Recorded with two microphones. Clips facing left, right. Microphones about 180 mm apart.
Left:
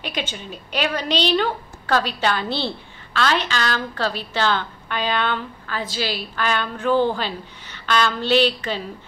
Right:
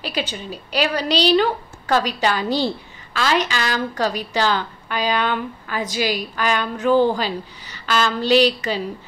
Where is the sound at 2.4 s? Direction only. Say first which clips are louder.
Right 5 dB; 40° right (ahead or behind).